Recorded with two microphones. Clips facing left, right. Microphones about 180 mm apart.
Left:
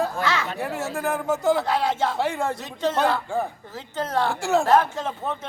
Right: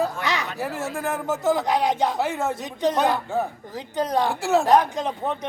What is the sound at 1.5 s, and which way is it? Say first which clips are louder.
Speech: right 1 dB; 15° right (ahead or behind).